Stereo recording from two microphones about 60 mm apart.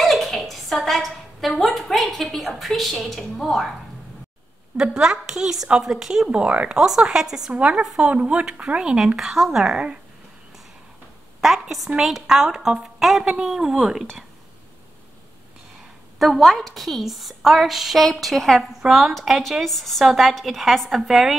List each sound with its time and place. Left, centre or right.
0.0 s a sound: centre
1.6 s a woman's voice: centre
4.7 s speech: centre
6.3 s speech: right
6.8 s speech: centre
7.5 s speech: right
11.6 s a woman's voice: centre
16.2 s a woman's voice: centre